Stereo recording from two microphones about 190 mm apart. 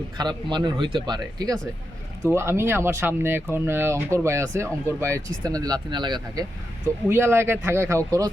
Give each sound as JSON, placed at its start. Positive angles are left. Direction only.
{"t": 0.2, "sound": "speech", "side_deg": -25}